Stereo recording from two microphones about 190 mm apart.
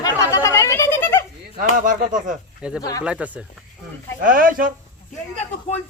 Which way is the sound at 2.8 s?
20° left (ahead or behind).